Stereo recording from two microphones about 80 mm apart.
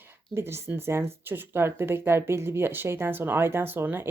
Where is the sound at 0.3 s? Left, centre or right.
Right.